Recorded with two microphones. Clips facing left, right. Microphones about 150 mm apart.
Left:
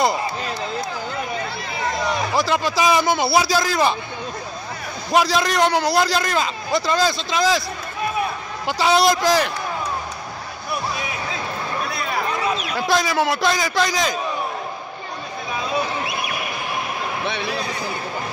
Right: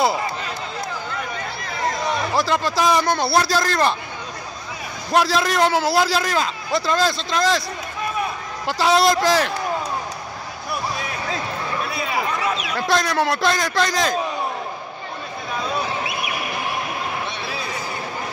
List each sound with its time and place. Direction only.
2.3 s a man's voice: centre (ahead or behind)
5.1 s a man's voice: centre (ahead or behind)
8.6 s a man's voice: centre (ahead or behind)
10.7 s music: 5° left (ahead or behind)
12.7 s a man's voice: centre (ahead or behind)